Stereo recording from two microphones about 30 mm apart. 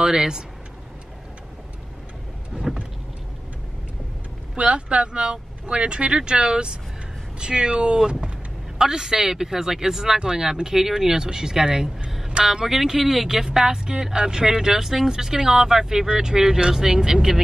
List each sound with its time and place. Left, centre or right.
0.0 s speech: right
2.7 s vehicle: centre
4.6 s speech: right; by 17.3 s centre